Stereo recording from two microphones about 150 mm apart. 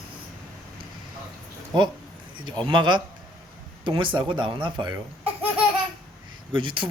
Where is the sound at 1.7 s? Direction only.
30° right (ahead or behind).